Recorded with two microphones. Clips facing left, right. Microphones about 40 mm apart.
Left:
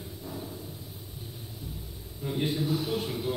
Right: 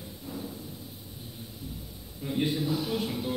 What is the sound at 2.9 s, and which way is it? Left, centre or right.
Music, right.